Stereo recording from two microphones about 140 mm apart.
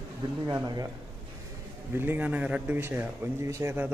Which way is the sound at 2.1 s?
10° right (ahead or behind).